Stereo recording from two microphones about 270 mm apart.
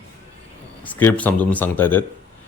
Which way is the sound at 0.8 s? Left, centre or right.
Centre.